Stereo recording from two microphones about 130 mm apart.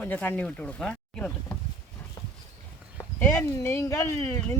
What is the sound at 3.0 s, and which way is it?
Speech, 20° left (ahead or behind).